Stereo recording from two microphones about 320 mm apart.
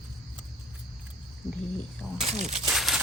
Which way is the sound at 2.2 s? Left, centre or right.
Centre.